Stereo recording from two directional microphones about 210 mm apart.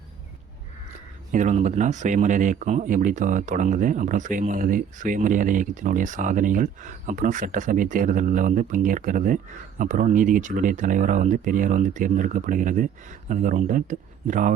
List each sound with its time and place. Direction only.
1.3 s speech: 35° right (ahead or behind)